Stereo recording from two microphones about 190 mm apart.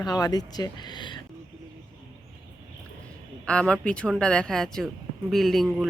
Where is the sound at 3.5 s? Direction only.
5° left (ahead or behind).